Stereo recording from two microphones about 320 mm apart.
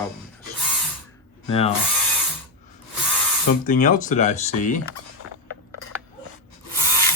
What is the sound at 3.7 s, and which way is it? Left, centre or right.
Speech, left.